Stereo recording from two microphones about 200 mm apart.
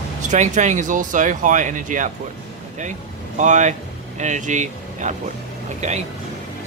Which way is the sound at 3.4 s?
35° right (ahead or behind).